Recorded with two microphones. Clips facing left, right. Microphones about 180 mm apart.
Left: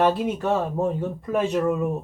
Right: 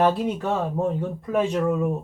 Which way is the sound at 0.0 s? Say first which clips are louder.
Even; centre (ahead or behind).